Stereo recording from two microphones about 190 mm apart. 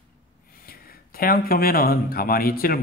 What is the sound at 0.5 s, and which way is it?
Speech, 50° left (ahead or behind).